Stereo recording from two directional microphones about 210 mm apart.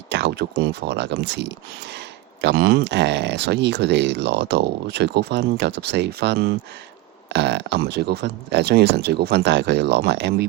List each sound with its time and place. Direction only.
0.1 s speech: 55° right (ahead or behind)